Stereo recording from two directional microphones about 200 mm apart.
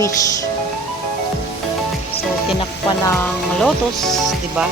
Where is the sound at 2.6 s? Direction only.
15° left (ahead or behind).